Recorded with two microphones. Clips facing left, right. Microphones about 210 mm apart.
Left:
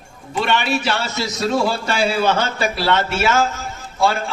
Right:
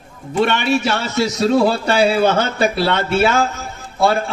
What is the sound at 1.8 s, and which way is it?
Speech, 35° right (ahead or behind).